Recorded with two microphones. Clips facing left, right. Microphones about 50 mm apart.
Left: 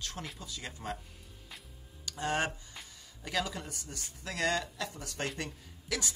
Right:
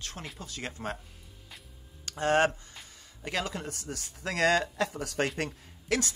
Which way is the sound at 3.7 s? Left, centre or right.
Right.